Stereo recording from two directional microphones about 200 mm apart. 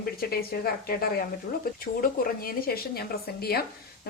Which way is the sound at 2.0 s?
45° left (ahead or behind).